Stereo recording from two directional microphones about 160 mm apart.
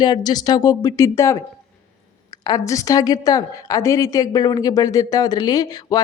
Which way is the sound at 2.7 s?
20° left (ahead or behind).